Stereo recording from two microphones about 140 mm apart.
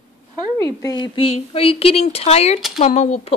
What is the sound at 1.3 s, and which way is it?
Speech, 40° left (ahead or behind).